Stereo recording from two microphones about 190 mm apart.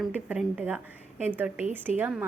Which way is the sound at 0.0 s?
5° right (ahead or behind).